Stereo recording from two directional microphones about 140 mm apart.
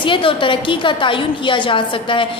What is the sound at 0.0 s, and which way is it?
A woman's voice, 40° left (ahead or behind).